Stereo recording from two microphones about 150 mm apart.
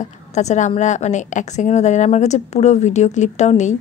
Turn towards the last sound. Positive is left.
turn(degrees=50)  # may be behind; listen again after turning